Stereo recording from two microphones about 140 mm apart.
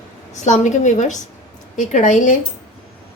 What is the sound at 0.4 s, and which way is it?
A woman's voice, 60° left (ahead or behind).